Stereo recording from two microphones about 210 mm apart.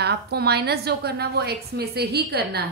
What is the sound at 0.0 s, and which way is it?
A woman's voice, 50° right (ahead or behind).